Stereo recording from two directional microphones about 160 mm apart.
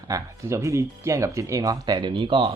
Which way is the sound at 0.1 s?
20° right (ahead or behind).